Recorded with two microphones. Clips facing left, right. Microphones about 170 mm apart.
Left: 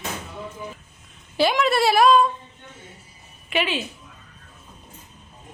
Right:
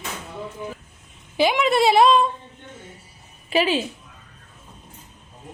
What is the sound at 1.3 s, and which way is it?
Speech, 15° right (ahead or behind).